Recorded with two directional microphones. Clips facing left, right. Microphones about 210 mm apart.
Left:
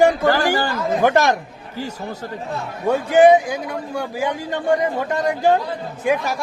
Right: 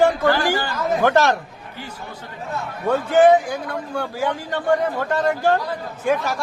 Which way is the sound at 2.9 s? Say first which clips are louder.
Left 2 dB; 15° left (ahead or behind).